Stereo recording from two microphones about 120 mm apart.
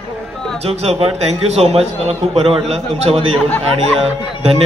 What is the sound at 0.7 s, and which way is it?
Speech, 55° right (ahead or behind).